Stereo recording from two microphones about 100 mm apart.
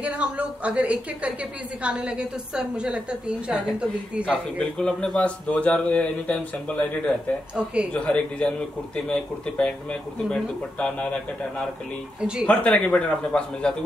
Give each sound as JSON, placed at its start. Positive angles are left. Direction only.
{"t": 0.0, "sound": "a woman's voice", "side_deg": -15}
{"t": 4.3, "sound": "a man's voice", "side_deg": 10}
{"t": 7.5, "sound": "a woman's voice", "side_deg": -10}
{"t": 7.9, "sound": "a man's voice", "side_deg": 10}
{"t": 12.2, "sound": "a woman's voice", "side_deg": -10}
{"t": 12.4, "sound": "a man's voice", "side_deg": 10}